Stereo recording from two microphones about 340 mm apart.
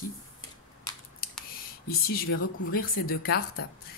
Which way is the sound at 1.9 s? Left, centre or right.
Left.